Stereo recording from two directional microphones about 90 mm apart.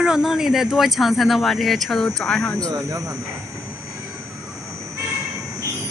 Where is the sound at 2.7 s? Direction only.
35° right (ahead or behind).